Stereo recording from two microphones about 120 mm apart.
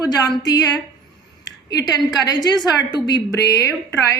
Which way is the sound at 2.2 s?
35° left (ahead or behind).